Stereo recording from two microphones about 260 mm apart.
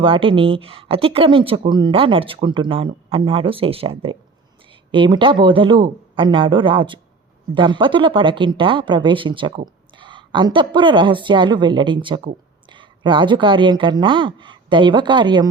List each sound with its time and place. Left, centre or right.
0.0 s speech: centre